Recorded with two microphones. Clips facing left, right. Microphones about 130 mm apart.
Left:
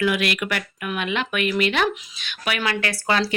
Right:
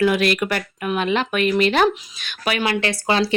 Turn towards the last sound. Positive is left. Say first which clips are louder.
# right 3 dB
turn(degrees=-25)  # may be behind; listen again after turning